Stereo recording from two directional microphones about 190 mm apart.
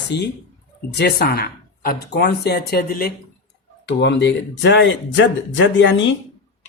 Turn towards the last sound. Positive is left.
turn(degrees=80)